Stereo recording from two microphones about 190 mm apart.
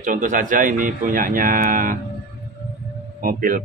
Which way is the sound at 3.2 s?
45° right (ahead or behind).